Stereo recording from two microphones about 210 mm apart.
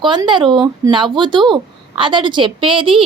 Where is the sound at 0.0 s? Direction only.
20° right (ahead or behind).